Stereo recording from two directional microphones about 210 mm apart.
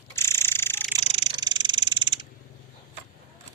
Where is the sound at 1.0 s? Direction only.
30° right (ahead or behind).